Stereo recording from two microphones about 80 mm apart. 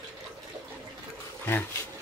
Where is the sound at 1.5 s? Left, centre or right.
Left.